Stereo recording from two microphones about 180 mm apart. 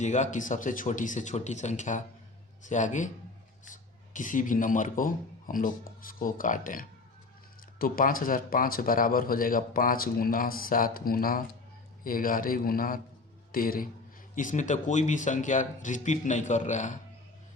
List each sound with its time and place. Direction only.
0.0 s a man's voice: 40° left (ahead or behind)